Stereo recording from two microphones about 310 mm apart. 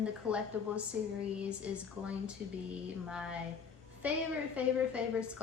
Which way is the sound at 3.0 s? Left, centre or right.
Centre.